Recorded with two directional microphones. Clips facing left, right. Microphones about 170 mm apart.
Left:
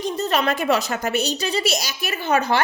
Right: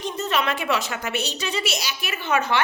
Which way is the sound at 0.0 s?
40° left (ahead or behind).